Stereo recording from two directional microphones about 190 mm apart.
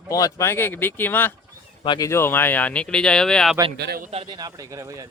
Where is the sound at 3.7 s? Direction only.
60° right (ahead or behind).